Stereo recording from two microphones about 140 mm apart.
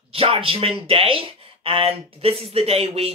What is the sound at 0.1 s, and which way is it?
Speech, 40° right (ahead or behind).